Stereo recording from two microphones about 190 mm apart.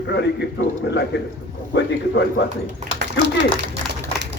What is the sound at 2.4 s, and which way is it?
Speech, 60° left (ahead or behind).